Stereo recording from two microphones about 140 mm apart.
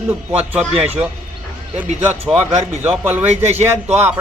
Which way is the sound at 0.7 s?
45° right (ahead or behind).